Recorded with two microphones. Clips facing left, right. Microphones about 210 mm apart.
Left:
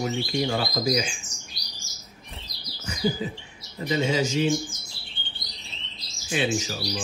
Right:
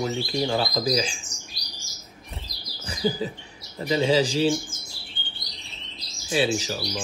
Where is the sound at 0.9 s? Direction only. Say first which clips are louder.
Right 1 dB; 35° right (ahead or behind).